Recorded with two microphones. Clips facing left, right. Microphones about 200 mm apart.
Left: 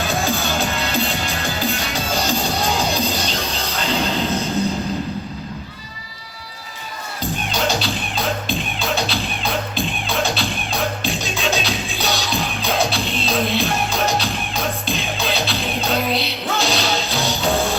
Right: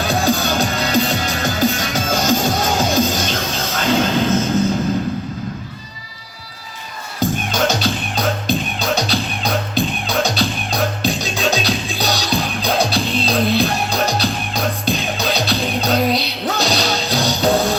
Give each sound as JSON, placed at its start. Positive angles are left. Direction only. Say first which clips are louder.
{"t": 0.3, "sound": "music", "louder": "right 4 dB", "side_deg": -40}
{"t": 7.2, "sound": "music", "louder": "right 5 dB", "side_deg": -45}